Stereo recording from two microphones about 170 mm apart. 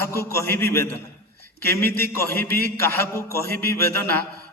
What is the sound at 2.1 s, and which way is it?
A man's voice, 15° left (ahead or behind).